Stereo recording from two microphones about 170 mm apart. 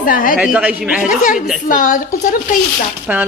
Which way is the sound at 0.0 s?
55° left (ahead or behind).